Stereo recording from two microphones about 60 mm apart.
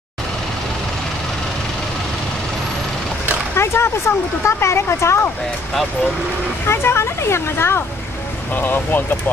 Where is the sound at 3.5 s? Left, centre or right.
Left.